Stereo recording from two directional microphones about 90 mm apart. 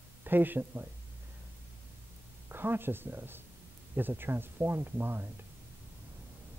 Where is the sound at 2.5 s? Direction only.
25° right (ahead or behind).